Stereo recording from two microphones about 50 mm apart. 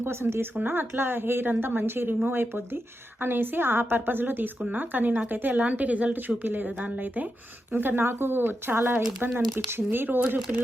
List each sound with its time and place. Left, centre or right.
0.0 s speech: right
0.5 s a woman's voice: right